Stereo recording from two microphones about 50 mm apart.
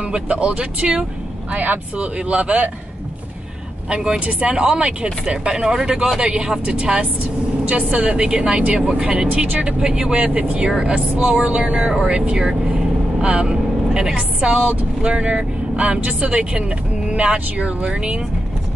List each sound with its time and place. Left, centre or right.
0.1 s speech: right
0.6 s speech: centre
1.5 s speech: right
3.9 s speech: centre
8.1 s speech: centre
10.1 s speech: right